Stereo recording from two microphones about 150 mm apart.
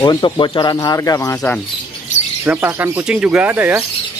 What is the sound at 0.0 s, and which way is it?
Speech, 30° left (ahead or behind).